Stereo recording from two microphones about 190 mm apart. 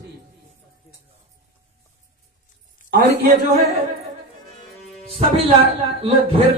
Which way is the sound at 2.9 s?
50° right (ahead or behind).